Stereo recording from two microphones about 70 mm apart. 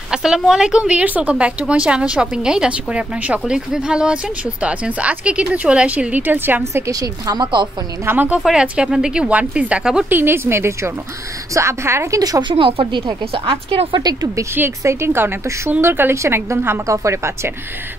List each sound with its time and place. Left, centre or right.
0.1 s speech: centre; by 6.6 s right
6.9 s a woman's voice: right
8.0 s a woman's voice: right
8.5 s speech: centre
10.0 s a woman's voice: right
12.2 s speech: right
13.5 s speech: right
14.8 s a woman's voice: right
16.8 s speech: right